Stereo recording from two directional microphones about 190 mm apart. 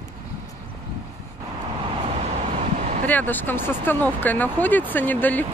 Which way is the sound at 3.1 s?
10° left (ahead or behind).